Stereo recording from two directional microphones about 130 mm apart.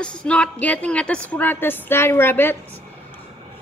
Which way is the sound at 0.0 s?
10° left (ahead or behind).